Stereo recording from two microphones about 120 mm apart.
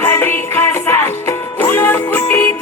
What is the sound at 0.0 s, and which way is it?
Music, 15° left (ahead or behind).